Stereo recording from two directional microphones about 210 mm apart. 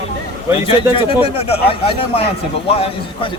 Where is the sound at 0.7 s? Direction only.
25° left (ahead or behind).